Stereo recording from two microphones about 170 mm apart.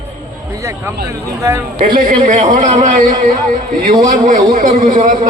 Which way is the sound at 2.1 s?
50° right (ahead or behind).